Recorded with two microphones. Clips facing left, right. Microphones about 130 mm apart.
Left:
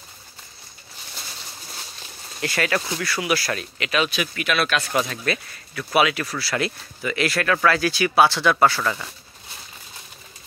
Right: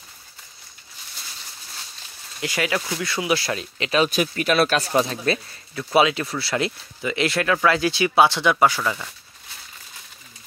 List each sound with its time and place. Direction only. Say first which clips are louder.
2.4 s speech: left 1 dB; 15° right (ahead or behind)